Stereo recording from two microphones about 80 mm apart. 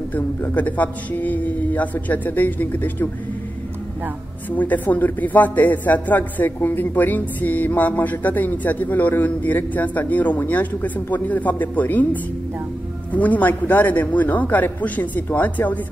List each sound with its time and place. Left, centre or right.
0.1 s speech: left
4.5 s speech: left